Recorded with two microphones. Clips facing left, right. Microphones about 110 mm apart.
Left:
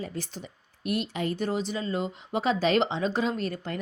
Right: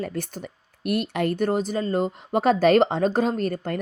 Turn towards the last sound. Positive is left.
turn(degrees=-50)  # may be behind; listen again after turning